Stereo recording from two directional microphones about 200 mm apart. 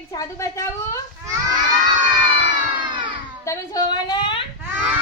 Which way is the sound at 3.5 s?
15° left (ahead or behind).